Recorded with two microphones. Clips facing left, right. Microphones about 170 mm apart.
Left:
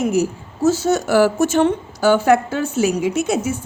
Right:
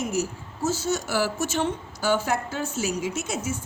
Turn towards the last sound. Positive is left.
turn(degrees=65)  # may be behind; listen again after turning